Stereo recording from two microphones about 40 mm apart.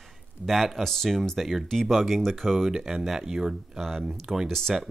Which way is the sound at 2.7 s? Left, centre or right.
Centre.